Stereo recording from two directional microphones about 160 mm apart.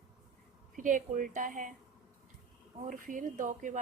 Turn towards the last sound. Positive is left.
turn(degrees=-55)  # may be behind; listen again after turning